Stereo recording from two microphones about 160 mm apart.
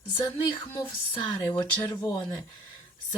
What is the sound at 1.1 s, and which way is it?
Speech, 25° left (ahead or behind).